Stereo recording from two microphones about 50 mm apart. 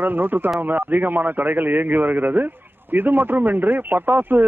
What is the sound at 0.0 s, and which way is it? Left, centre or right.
Speech, right.